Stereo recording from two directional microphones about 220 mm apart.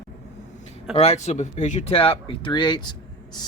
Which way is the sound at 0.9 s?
30° left (ahead or behind).